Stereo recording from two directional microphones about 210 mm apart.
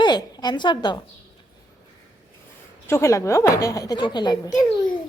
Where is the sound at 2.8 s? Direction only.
15° left (ahead or behind).